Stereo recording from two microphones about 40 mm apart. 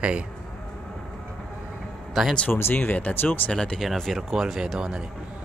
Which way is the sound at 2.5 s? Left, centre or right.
Left.